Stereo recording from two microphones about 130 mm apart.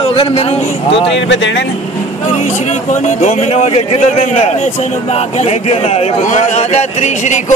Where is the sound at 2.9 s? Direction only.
65° left (ahead or behind).